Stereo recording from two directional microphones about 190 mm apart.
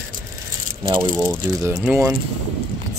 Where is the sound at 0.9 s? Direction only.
20° right (ahead or behind).